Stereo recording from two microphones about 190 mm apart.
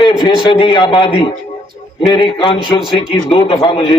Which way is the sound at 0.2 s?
25° left (ahead or behind).